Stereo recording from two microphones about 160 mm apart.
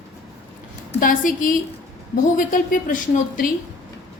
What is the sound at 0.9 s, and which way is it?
Speech, 60° left (ahead or behind).